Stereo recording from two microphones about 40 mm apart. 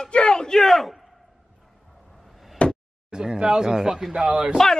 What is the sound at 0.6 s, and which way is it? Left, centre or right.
Speech, centre.